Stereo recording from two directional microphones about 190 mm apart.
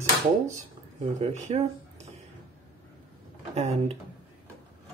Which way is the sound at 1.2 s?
35° right (ahead or behind).